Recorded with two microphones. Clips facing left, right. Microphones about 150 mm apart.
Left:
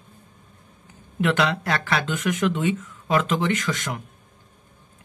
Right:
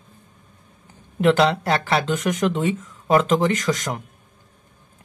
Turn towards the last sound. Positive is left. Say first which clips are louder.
# right 3 dB
turn(degrees=-40)  # may be behind; listen again after turning